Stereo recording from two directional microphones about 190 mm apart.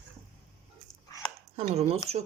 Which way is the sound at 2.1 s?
35° right (ahead or behind).